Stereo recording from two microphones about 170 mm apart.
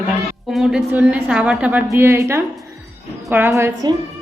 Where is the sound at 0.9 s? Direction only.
10° right (ahead or behind).